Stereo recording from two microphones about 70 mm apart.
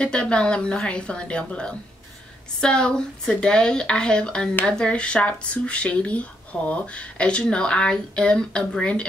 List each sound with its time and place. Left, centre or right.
0.0 s speech: centre